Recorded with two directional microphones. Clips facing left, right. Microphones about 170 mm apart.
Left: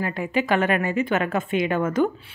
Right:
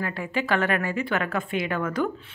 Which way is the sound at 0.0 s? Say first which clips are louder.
Left 4 dB; 15° left (ahead or behind).